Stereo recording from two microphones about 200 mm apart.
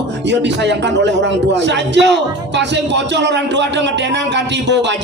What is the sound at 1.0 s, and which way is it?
A man's voice, 60° right (ahead or behind).